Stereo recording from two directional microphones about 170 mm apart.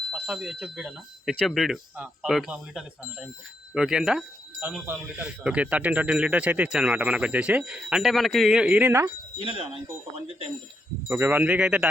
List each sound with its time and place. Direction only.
0.1 s speech: 5° right (ahead or behind)
9.4 s speech: 30° right (ahead or behind)
11.1 s speech: 10° right (ahead or behind)